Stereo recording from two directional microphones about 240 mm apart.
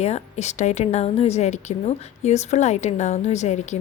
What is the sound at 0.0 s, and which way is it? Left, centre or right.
A woman's voice, left.